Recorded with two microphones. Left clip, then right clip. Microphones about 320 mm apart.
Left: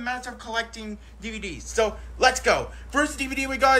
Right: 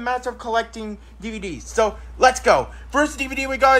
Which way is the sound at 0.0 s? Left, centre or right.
Centre.